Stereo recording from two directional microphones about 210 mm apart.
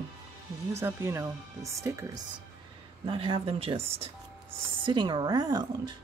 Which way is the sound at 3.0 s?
25° right (ahead or behind).